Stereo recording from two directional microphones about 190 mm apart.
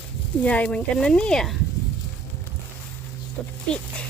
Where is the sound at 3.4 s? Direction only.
10° left (ahead or behind).